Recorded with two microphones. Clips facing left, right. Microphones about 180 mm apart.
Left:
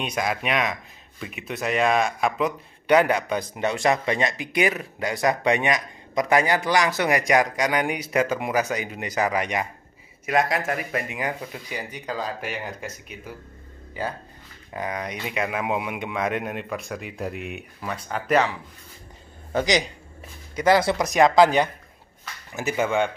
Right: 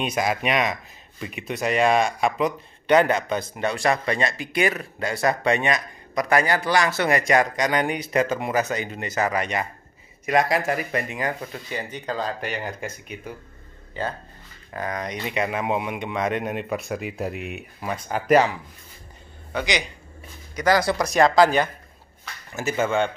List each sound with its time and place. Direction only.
0.0 s speech: 5° right (ahead or behind); by 9.7 s 15° left (ahead or behind)
10.2 s speech: 5° left (ahead or behind)
19.5 s a man's voice: 40° left (ahead or behind)
20.5 s speech: 25° left (ahead or behind)